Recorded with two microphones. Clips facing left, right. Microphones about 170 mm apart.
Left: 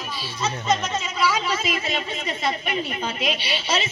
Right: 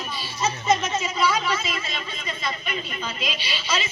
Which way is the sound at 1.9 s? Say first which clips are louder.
Left 6 dB; 75° left (ahead or behind).